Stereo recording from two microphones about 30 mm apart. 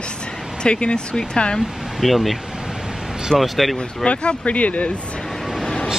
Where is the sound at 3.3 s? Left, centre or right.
Centre.